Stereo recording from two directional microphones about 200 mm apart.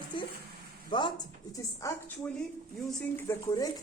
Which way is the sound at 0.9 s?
25° left (ahead or behind).